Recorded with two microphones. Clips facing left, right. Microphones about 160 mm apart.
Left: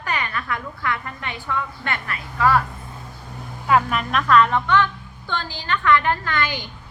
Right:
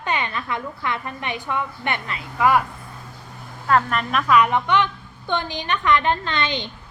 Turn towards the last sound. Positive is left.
turn(degrees=-25)  # may be behind; listen again after turning